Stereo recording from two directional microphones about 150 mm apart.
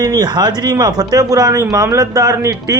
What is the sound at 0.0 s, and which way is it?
Speech, 25° right (ahead or behind).